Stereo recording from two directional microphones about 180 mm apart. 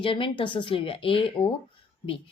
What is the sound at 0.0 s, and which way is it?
A woman's voice, 30° left (ahead or behind).